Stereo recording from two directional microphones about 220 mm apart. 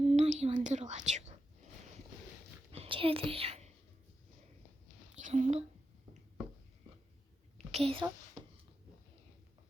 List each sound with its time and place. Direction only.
0.2 s whispering: 30° right (ahead or behind)
2.7 s whispering: 25° right (ahead or behind)
5.1 s a sound: 35° right (ahead or behind)
7.7 s a child's voice: 25° right (ahead or behind)